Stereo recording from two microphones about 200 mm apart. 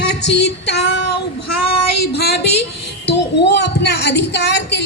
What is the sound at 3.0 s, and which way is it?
A woman's voice, 60° left (ahead or behind).